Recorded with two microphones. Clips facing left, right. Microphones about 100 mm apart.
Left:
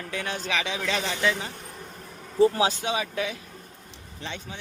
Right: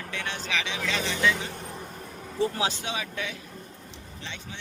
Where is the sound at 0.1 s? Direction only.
40° left (ahead or behind).